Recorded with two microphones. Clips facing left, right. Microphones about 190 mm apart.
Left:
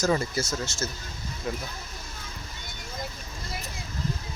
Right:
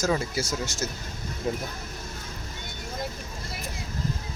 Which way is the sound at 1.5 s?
30° right (ahead or behind).